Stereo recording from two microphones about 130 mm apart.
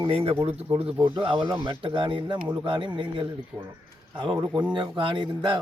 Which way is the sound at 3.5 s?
5° left (ahead or behind).